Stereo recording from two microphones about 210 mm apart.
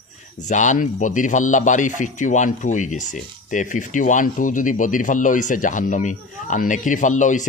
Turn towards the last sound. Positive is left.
turn(degrees=35)  # may be behind; listen again after turning